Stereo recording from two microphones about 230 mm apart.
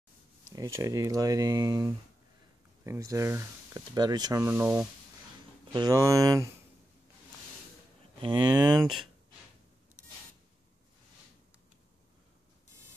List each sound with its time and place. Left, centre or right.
0.7 s speech: centre
8.2 s speech: centre